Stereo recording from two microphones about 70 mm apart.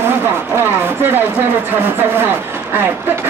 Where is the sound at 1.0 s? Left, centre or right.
Right.